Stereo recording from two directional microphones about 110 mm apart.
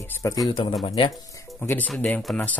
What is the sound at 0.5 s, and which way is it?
Speech, 50° left (ahead or behind).